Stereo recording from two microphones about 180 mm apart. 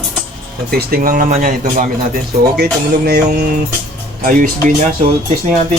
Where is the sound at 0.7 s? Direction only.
60° right (ahead or behind).